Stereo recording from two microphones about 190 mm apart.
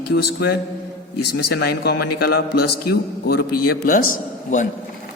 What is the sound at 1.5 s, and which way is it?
A man's voice, 60° left (ahead or behind).